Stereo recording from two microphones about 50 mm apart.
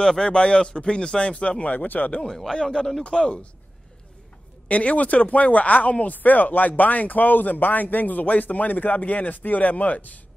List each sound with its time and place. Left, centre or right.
0.0 s speech: centre; by 2.2 s left
2.2 s speech: centre
4.6 s speech: left